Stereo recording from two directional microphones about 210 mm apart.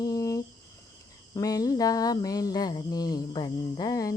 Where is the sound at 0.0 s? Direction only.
15° left (ahead or behind).